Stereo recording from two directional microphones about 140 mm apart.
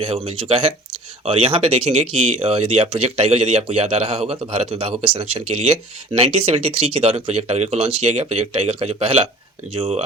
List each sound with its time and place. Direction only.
0.0 s speech: 40° right (ahead or behind)